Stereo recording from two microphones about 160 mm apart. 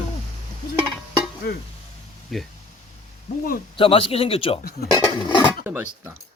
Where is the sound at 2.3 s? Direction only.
Centre (ahead or behind).